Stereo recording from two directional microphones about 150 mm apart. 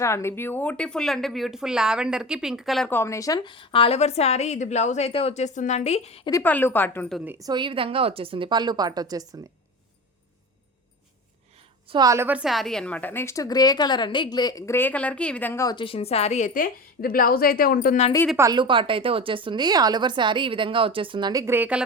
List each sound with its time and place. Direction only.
0.0 s a woman's voice: 20° left (ahead or behind); by 2.9 s centre (ahead or behind)
2.9 s a woman's voice: 20° left (ahead or behind); by 6.2 s 45° left (ahead or behind)
6.4 s a woman's voice: 10° left (ahead or behind)
7.3 s a woman's voice: 25° right (ahead or behind)
11.5 s a sound: 35° right (ahead or behind)
12.0 s a woman's voice: 15° right (ahead or behind); by 15.6 s 10° left (ahead or behind)
15.6 s a woman's voice: 35° left (ahead or behind); by 17.9 s 75° left (ahead or behind)
18.3 s a woman's voice: 20° right (ahead or behind)
18.6 s speech: 35° right (ahead or behind)
21.4 s speech: 15° right (ahead or behind)